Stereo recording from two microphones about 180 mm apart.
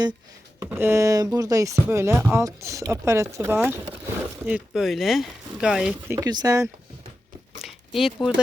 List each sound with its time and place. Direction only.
0.6 s speech: 15° right (ahead or behind)
6.1 s speech: 20° right (ahead or behind)
7.6 s a sound: centre (ahead or behind)